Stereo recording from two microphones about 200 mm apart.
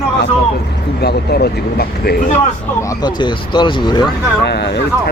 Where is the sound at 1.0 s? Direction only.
55° left (ahead or behind).